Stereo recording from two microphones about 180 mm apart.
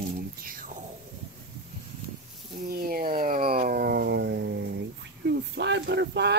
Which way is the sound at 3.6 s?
60° right (ahead or behind).